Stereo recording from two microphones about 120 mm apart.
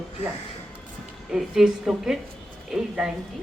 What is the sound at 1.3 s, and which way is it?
A woman's voice, 5° right (ahead or behind).